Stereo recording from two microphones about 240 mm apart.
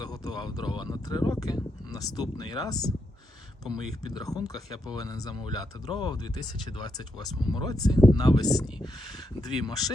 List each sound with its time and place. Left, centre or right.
0.0 s speech: centre
3.6 s speech: centre
4.1 s speech: centre